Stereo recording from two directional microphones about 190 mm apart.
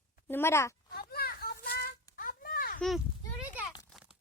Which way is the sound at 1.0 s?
50° left (ahead or behind).